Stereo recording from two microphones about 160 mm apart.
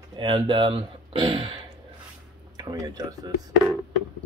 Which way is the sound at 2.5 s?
25° right (ahead or behind).